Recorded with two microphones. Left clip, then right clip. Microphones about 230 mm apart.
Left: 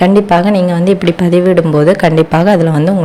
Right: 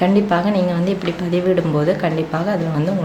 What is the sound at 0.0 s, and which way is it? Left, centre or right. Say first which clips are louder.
Speech: left 8 dB; left.